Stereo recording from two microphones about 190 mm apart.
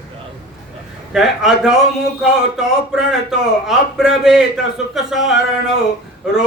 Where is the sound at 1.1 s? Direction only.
Centre (ahead or behind).